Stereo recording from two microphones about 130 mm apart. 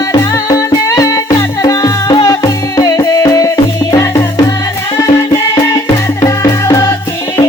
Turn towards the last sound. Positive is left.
turn(degrees=25)  # may be behind; listen again after turning